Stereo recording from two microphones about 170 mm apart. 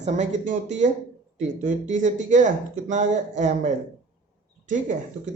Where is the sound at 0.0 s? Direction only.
45° right (ahead or behind).